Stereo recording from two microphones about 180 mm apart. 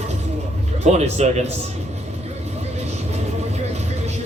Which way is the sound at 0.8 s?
40° right (ahead or behind).